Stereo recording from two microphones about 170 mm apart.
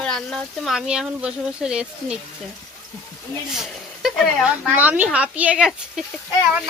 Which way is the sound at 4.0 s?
Centre (ahead or behind).